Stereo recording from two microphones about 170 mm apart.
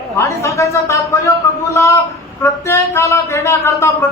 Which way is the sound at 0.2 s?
15° left (ahead or behind).